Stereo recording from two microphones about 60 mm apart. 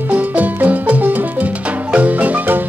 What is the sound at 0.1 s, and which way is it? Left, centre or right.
Music, right.